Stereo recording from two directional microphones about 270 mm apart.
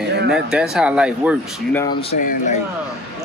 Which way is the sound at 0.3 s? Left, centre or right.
Centre.